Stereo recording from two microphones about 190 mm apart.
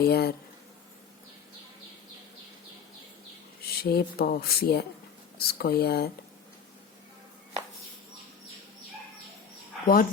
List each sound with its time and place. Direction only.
0.0 s speech: 55° left (ahead or behind)
3.7 s speech: 55° left (ahead or behind)
9.8 s speech: 45° left (ahead or behind)